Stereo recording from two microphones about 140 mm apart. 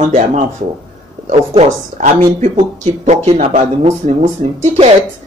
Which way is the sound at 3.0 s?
50° right (ahead or behind).